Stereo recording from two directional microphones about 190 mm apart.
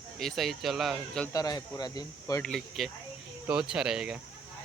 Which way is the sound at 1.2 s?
20° left (ahead or behind).